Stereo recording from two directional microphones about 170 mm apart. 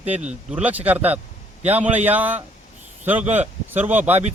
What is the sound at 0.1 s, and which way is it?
Speech, 45° right (ahead or behind).